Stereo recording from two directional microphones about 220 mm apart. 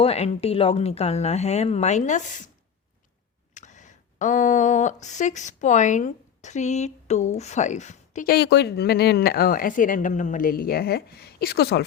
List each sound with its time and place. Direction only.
0.0 s speech: 25° left (ahead or behind)
3.5 s speech: 35° left (ahead or behind)